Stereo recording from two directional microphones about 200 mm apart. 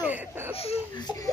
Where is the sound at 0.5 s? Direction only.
30° left (ahead or behind).